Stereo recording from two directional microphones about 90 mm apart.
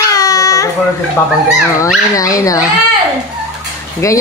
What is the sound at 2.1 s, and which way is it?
Speech, 40° left (ahead or behind).